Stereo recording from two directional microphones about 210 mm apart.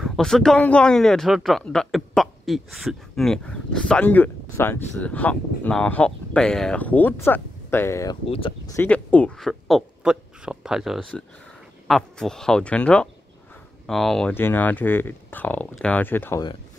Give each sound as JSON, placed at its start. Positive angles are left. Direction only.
{"t": 0.0, "sound": "speech", "side_deg": 0}
{"t": 8.3, "sound": "speech", "side_deg": 25}
{"t": 8.7, "sound": "speech", "side_deg": 5}